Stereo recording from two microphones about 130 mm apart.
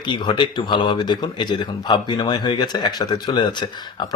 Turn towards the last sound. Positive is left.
turn(degrees=35)  # may be behind; listen again after turning